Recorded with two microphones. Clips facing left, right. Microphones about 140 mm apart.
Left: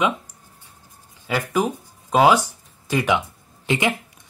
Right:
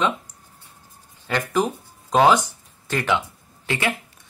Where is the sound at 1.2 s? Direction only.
10° left (ahead or behind).